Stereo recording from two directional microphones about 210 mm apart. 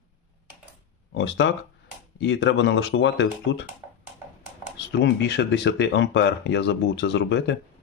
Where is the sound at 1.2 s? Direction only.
60° left (ahead or behind).